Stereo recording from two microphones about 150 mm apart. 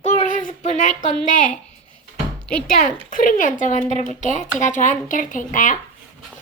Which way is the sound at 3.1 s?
60° left (ahead or behind).